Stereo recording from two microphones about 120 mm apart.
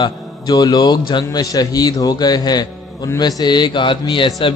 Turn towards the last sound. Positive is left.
turn(degrees=40)  # may be behind; listen again after turning